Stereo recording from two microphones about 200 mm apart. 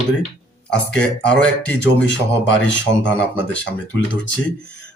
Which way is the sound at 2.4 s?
65° left (ahead or behind).